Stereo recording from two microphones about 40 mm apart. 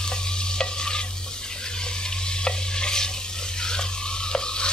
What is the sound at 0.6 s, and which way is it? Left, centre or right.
Stir, centre.